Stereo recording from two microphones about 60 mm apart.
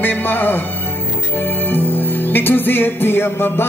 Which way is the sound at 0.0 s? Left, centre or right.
Left.